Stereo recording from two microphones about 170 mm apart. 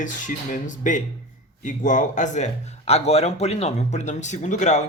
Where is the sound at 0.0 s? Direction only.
50° left (ahead or behind).